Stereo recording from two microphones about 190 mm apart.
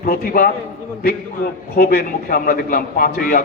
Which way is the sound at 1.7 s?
50° left (ahead or behind).